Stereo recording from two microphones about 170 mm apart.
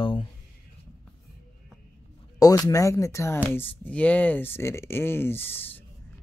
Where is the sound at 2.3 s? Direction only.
20° left (ahead or behind).